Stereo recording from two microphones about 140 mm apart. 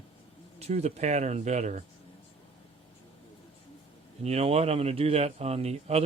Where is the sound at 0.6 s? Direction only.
50° right (ahead or behind).